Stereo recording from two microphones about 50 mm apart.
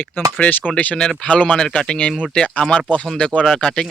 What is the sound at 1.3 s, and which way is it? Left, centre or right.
Speech, left.